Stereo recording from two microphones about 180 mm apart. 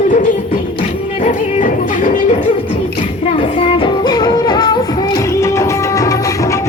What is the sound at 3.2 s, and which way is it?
Music, 30° left (ahead or behind).